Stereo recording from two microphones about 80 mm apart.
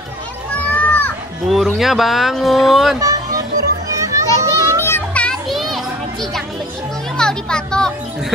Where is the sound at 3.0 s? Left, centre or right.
Right.